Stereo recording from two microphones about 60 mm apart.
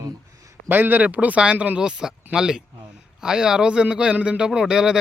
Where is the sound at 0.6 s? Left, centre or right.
Right.